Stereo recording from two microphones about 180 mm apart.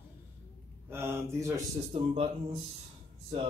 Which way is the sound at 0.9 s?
15° right (ahead or behind).